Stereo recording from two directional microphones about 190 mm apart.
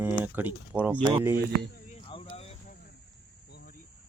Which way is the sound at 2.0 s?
30° left (ahead or behind).